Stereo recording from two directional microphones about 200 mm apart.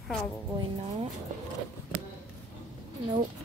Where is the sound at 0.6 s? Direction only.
30° right (ahead or behind).